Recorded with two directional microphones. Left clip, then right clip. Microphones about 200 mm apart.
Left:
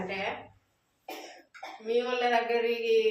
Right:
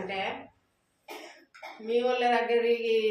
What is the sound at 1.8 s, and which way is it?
Speech, 15° right (ahead or behind).